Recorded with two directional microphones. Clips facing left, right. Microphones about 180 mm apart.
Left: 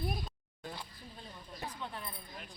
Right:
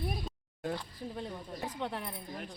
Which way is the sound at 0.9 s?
80° right.